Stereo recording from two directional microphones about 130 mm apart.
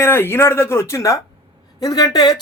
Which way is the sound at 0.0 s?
20° left (ahead or behind).